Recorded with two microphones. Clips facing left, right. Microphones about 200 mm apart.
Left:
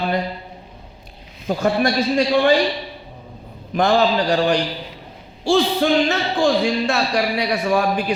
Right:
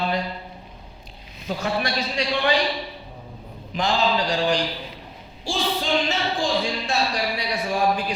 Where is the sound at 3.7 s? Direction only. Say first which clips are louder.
Left 6 dB; 55° left (ahead or behind).